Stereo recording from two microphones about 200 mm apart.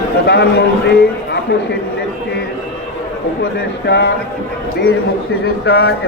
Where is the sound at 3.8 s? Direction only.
60° left (ahead or behind).